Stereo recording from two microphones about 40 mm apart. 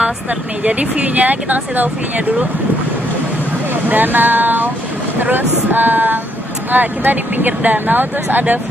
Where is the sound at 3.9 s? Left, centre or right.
Right.